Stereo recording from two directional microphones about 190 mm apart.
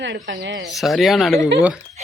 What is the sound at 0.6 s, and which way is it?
Speech, centre (ahead or behind).